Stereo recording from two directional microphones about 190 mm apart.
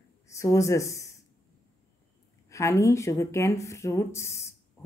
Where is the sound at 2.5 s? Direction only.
15° left (ahead or behind).